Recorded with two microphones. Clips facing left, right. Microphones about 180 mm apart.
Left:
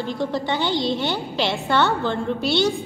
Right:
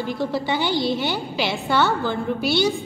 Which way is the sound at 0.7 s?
20° left (ahead or behind).